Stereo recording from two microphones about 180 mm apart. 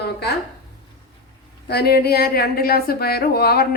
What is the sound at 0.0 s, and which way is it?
Speech, 65° left (ahead or behind).